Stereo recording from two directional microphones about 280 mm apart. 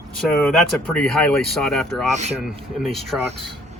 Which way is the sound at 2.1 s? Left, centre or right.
Right.